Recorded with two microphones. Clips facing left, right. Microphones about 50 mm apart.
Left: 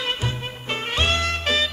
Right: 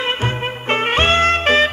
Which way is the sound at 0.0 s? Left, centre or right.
Right.